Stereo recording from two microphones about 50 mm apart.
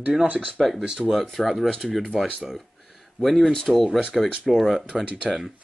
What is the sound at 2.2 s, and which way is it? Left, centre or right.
Speech, centre.